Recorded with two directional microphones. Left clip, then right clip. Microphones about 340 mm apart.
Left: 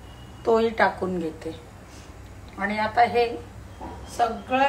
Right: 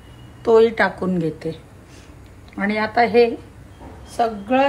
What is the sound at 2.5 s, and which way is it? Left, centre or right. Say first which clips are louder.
A woman's voice: right 3 dB; centre.